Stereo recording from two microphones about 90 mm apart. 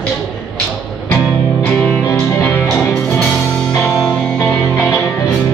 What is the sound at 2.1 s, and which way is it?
Music, 25° left (ahead or behind).